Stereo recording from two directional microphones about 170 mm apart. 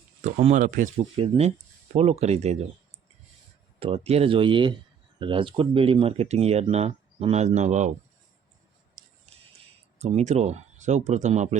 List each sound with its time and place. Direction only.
0.2 s speech: 40° right (ahead or behind)
1.2 s speech: 35° right (ahead or behind)
3.8 s speech: 35° right (ahead or behind)
9.0 s music: 50° right (ahead or behind)
10.0 s speech: 40° right (ahead or behind)